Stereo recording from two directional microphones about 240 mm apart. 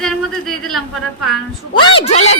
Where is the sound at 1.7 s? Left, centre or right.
Left.